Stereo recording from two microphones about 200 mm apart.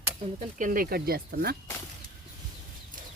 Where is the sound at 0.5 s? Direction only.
40° right (ahead or behind).